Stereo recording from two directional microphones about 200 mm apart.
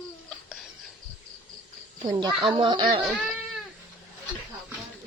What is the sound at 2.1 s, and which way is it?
Speech, 20° right (ahead or behind).